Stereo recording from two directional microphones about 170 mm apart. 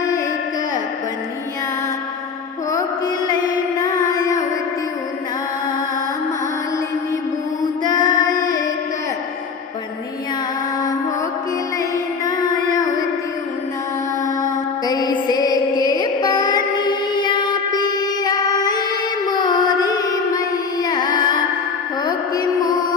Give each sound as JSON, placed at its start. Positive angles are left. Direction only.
{"t": 7.9, "sound": "female singing", "side_deg": 25}
{"t": 11.8, "sound": "music", "side_deg": 20}
{"t": 14.3, "sound": "music", "side_deg": 20}